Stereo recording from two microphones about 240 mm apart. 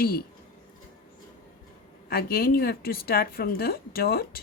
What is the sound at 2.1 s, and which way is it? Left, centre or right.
A woman's voice, left.